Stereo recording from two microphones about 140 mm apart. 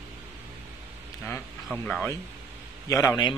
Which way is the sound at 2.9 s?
25° left (ahead or behind).